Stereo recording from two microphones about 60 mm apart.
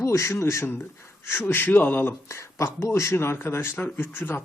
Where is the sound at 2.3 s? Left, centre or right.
Left.